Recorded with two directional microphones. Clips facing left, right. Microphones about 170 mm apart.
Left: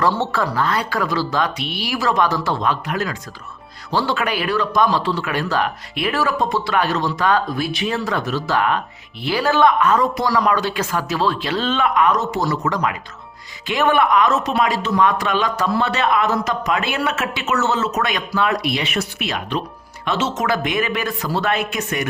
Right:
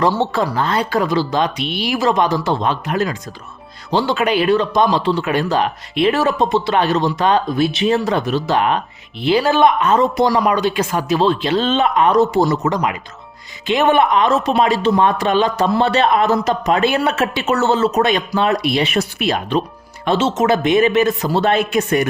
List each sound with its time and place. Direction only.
0.1 s speech: 15° right (ahead or behind); by 22.1 s 30° right (ahead or behind)